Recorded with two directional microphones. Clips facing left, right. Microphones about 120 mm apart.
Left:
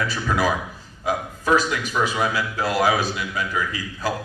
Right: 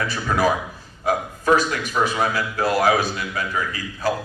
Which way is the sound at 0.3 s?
45° right (ahead or behind).